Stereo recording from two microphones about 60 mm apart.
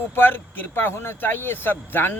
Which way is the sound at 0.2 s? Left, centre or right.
Left.